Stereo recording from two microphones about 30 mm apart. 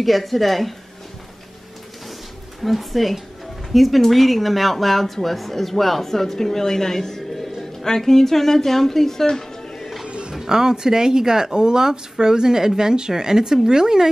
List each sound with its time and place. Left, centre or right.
0.0 s speech: centre
2.6 s a woman's voice: centre
9.2 s music: left
10.0 s a sound: right
10.3 s speech: centre